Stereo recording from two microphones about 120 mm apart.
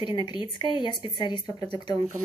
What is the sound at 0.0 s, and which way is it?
Speech, 40° left (ahead or behind).